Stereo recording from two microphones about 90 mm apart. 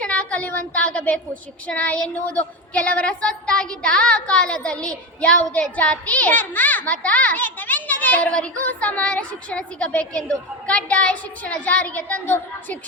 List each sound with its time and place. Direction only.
0.0 s speech: 15° left (ahead or behind)